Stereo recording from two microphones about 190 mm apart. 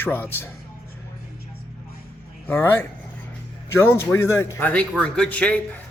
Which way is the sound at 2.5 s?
10° left (ahead or behind).